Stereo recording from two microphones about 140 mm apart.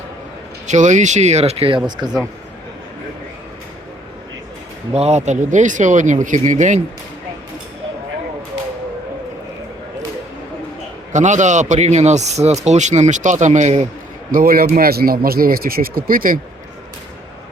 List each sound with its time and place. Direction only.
0.7 s speech: 60° right (ahead or behind); by 2.0 s 40° right (ahead or behind)
4.9 s speech: 55° right (ahead or behind)
11.1 s speech: 60° right (ahead or behind)
14.3 s speech: 85° right